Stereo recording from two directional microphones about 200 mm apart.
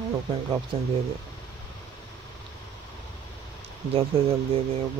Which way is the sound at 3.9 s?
30° right (ahead or behind).